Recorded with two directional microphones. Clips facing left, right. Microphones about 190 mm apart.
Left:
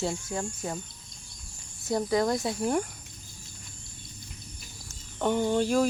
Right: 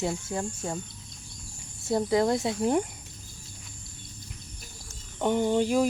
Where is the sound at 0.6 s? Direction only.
10° left (ahead or behind).